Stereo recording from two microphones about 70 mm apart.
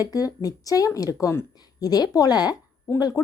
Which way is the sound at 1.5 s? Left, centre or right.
Left.